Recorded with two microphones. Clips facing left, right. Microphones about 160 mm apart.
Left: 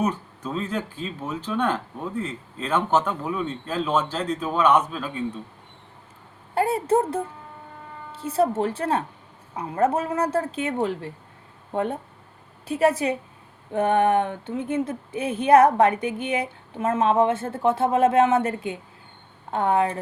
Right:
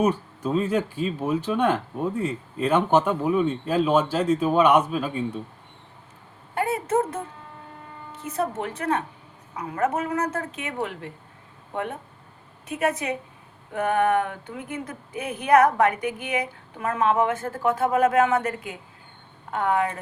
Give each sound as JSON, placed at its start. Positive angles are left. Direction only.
{"t": 0.0, "sound": "speech", "side_deg": -10}
{"t": 6.5, "sound": "a sound", "side_deg": 30}
{"t": 8.1, "sound": "a woman's voice", "side_deg": 30}